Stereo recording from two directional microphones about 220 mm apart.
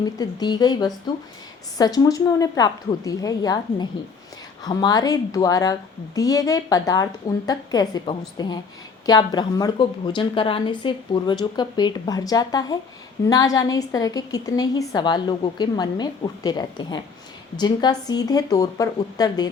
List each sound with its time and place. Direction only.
0.0 s a woman's voice: 20° left (ahead or behind)